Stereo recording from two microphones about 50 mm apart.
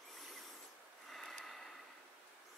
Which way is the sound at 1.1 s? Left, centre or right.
Centre.